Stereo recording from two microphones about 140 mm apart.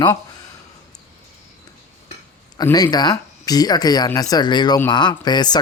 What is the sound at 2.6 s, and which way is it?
Speech, 25° left (ahead or behind).